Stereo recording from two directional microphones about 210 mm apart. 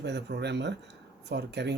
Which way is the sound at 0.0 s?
55° right (ahead or behind).